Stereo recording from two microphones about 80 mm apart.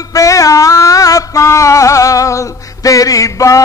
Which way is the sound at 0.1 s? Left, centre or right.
Left.